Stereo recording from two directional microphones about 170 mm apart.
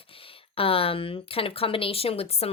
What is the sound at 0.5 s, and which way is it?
Speech, 35° left (ahead or behind).